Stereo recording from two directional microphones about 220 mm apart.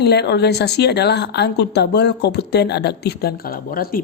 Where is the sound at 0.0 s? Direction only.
50° left (ahead or behind).